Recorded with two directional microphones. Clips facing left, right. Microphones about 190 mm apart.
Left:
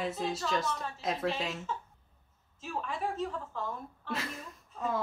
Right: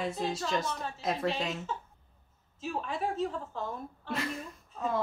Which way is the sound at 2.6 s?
30° right (ahead or behind).